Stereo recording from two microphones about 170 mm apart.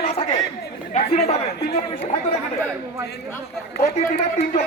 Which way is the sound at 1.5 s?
70° left (ahead or behind).